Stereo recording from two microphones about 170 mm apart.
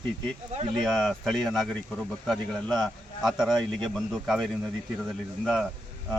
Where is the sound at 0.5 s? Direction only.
35° right (ahead or behind).